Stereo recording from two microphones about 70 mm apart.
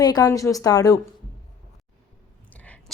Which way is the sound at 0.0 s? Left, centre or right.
Left.